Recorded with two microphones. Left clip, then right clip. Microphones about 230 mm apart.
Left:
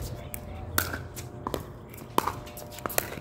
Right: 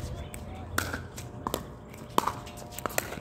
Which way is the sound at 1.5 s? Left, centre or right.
Right.